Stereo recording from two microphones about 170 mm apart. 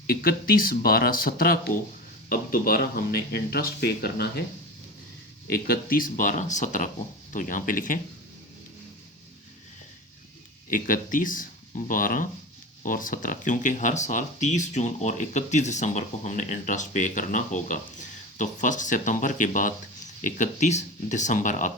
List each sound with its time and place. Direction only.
0.1 s speech: 60° left (ahead or behind)
5.5 s speech: 60° left (ahead or behind)
10.7 s speech: 55° left (ahead or behind)